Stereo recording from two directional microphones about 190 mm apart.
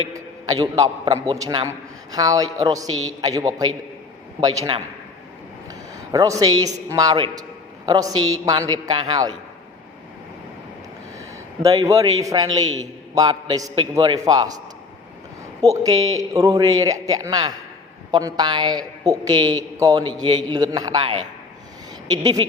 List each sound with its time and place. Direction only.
0.6 s a man's voice: 20° right (ahead or behind)
6.1 s a man's voice: 15° right (ahead or behind)
11.6 s a man's voice: 15° right (ahead or behind)
15.7 s a man's voice: 20° right (ahead or behind)